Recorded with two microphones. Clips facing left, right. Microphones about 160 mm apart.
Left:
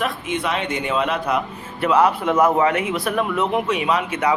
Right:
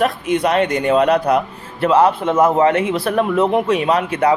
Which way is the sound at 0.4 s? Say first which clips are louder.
Right 9 dB; 45° right (ahead or behind).